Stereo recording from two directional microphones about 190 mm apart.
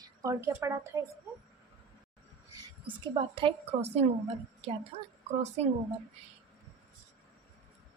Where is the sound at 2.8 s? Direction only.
25° right (ahead or behind).